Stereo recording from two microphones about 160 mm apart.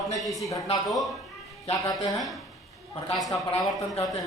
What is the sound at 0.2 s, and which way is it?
Speech, centre (ahead or behind).